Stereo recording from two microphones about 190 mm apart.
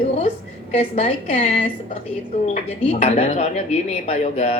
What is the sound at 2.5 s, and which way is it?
A woman's voice, 35° left (ahead or behind).